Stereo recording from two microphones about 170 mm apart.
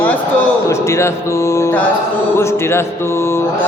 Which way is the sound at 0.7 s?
15° left (ahead or behind).